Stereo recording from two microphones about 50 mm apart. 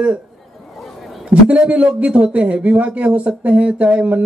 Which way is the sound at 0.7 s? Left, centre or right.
Centre.